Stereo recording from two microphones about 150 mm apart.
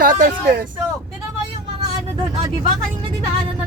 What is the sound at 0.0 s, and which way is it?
Speech, 70° right (ahead or behind).